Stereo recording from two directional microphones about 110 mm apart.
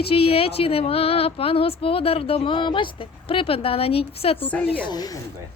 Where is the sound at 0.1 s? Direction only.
60° left (ahead or behind).